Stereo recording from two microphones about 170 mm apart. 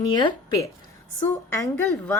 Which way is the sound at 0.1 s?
25° left (ahead or behind).